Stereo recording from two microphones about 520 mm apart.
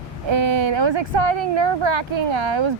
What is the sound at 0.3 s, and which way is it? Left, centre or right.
Speech, right.